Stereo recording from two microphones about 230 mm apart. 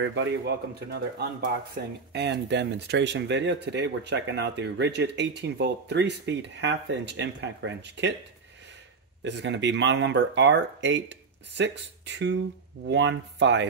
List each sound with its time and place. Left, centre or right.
0.0 s speech: right
9.2 s speech: right